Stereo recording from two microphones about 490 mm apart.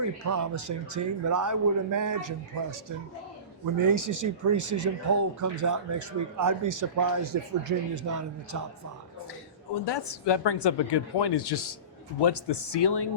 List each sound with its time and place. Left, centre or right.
0.0 s speech: right
3.8 s speech: right
9.8 s speech: left